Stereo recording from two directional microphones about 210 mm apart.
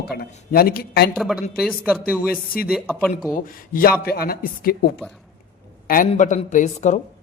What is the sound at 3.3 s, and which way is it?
A man's voice, 40° left (ahead or behind).